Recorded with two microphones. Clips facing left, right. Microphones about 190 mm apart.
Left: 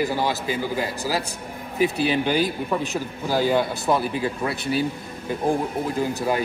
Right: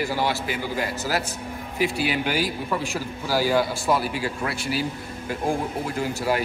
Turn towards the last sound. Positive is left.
turn(degrees=20)  # may be behind; listen again after turning